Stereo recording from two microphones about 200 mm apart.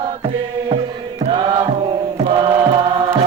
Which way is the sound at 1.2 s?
25° right (ahead or behind).